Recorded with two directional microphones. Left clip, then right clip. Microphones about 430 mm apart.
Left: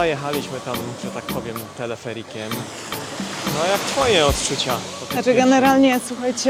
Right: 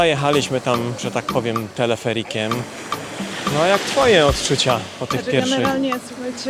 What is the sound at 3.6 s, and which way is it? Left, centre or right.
Speech, right.